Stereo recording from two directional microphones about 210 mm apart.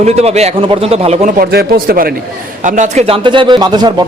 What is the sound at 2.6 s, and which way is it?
A man's voice, 35° right (ahead or behind).